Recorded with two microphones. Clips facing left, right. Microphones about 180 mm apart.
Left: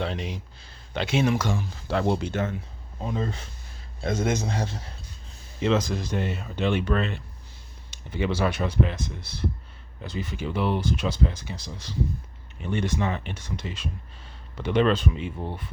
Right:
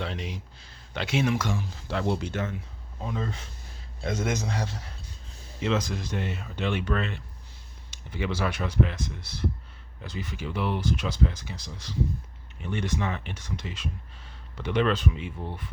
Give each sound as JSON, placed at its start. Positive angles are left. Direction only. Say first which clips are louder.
{"t": 0.0, "sound": "speech", "louder": "left 4 dB", "side_deg": 30}